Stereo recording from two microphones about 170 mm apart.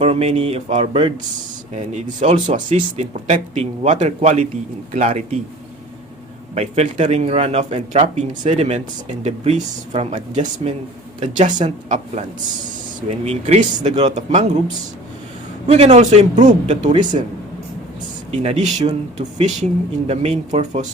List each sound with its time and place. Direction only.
0.0 s speech: 40° right (ahead or behind)
6.5 s speech: 40° right (ahead or behind)
15.6 s speech: 40° right (ahead or behind)
18.3 s speech: 40° right (ahead or behind)